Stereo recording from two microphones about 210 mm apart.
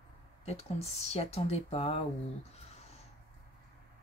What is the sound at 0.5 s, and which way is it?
Speech, 30° left (ahead or behind).